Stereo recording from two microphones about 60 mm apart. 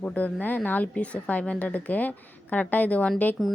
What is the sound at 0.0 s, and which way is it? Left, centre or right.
A woman's voice, left.